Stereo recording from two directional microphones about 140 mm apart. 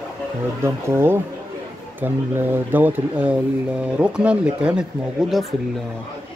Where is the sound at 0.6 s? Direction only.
20° right (ahead or behind).